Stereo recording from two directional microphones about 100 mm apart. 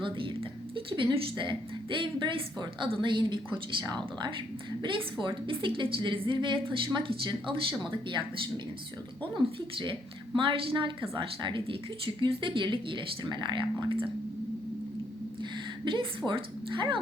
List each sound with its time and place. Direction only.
0.0 s a woman's voice: 55° right (ahead or behind)
7.8 s speech: 50° right (ahead or behind)
9.7 s a woman's voice: 55° right (ahead or behind)
15.4 s a woman's voice: 55° right (ahead or behind)